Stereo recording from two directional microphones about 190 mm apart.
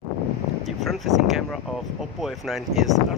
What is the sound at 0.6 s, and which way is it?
Speech, centre (ahead or behind).